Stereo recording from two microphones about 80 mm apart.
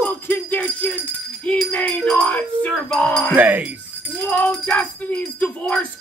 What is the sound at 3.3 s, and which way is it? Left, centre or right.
Speech, centre.